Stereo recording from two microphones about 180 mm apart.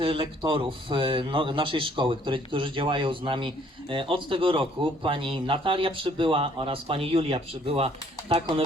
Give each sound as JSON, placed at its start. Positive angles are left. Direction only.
{"t": 0.0, "sound": "speech", "side_deg": -30}